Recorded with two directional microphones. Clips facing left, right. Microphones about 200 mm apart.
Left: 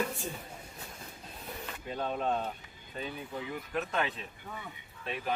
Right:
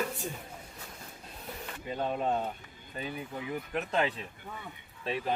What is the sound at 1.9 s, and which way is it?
Speech, 10° right (ahead or behind).